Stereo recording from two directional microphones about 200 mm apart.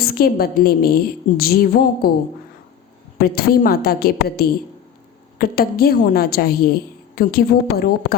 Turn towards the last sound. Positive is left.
turn(degrees=50)  # may be behind; listen again after turning